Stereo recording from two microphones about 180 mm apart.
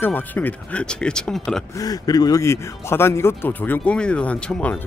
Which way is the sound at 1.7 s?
20° left (ahead or behind).